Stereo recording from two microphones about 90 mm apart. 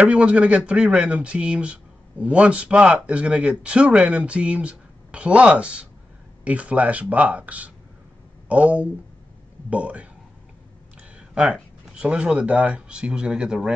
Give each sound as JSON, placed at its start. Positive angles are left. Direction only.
{"t": 0.0, "sound": "speech", "side_deg": -15}
{"t": 11.0, "sound": "a sound", "side_deg": -10}
{"t": 11.9, "sound": "speech", "side_deg": -10}